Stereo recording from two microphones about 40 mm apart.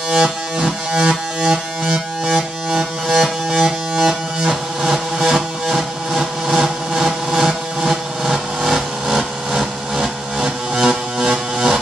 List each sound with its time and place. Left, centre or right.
0.1 s music: centre
4.4 s music: centre